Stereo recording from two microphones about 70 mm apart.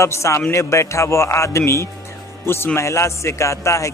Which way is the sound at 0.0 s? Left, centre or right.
Left.